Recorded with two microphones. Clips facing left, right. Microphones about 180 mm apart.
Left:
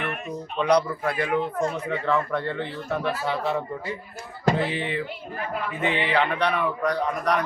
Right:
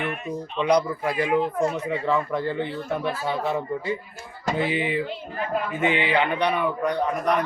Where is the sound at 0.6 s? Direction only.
10° right (ahead or behind).